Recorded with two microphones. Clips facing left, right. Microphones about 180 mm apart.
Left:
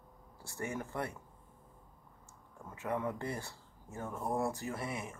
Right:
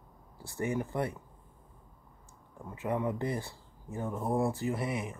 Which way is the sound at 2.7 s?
15° right (ahead or behind).